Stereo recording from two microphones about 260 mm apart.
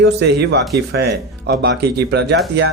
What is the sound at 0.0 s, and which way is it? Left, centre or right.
Speech, right.